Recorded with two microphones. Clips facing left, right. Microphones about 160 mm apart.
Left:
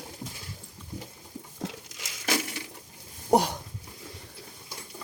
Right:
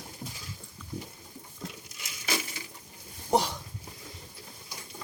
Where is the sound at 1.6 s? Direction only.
85° left.